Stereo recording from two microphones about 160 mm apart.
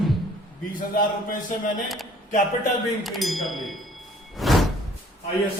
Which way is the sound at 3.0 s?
Centre (ahead or behind).